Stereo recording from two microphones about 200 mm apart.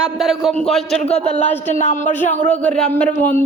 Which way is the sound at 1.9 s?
40° left (ahead or behind).